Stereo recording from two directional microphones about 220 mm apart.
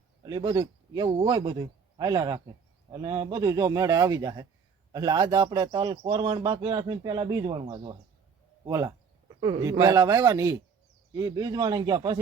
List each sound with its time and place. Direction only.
0.3 s speech: 20° right (ahead or behind)